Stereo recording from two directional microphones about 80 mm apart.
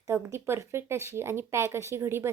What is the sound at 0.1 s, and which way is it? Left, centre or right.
Speech, right.